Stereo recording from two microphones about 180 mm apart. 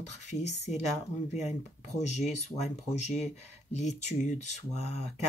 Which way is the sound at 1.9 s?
40° left (ahead or behind).